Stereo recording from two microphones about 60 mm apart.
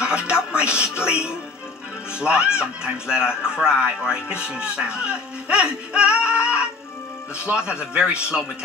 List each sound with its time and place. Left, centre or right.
0.0 s speech: centre